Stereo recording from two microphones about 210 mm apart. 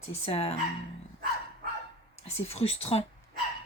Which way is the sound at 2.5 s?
30° left (ahead or behind).